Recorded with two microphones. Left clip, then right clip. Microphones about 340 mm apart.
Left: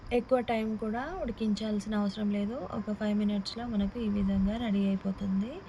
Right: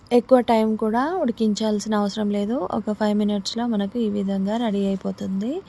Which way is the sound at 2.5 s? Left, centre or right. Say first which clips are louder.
Right 12 dB; right.